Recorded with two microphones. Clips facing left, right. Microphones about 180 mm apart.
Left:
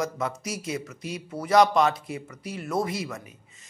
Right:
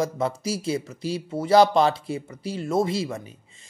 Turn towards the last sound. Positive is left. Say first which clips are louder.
# right 5 dB
turn(degrees=-30)  # may be behind; listen again after turning